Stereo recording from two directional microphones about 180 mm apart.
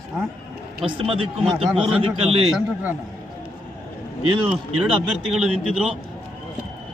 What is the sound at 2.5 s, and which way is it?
Speech, 5° right (ahead or behind).